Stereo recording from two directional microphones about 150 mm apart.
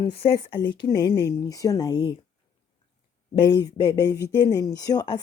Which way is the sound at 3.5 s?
25° left (ahead or behind).